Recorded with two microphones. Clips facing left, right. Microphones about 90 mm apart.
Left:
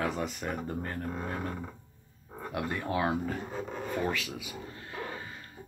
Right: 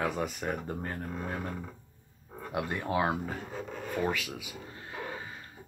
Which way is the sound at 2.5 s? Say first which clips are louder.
Right 1 dB; 15° right (ahead or behind).